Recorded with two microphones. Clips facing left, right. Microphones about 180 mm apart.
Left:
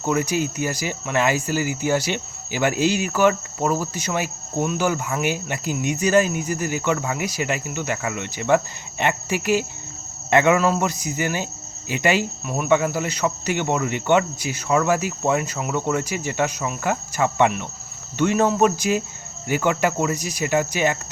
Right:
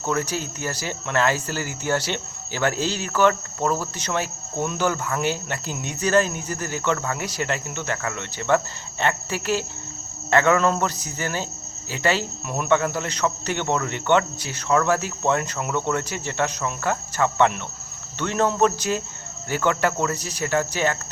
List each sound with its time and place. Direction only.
0.0 s speech: 15° left (ahead or behind)
12.5 s speech: 5° left (ahead or behind)